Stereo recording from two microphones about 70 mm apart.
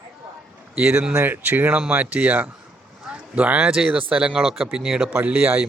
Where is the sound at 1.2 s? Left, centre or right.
Right.